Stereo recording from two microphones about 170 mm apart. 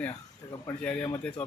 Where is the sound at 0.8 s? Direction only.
5° left (ahead or behind).